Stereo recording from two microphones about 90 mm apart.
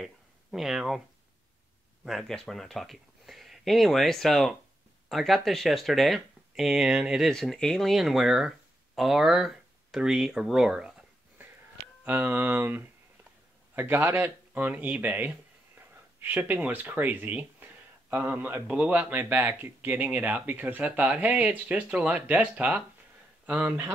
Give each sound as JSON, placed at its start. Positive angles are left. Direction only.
{"t": 0.0, "sound": "a sound", "side_deg": -5}
{"t": 2.0, "sound": "speech", "side_deg": 0}
{"t": 12.0, "sound": "speech", "side_deg": -20}